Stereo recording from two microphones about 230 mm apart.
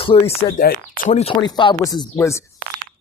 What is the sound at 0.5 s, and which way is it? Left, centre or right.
Speech, left.